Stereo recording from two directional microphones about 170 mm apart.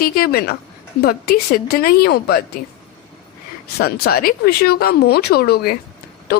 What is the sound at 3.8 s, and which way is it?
Speech, 65° left (ahead or behind).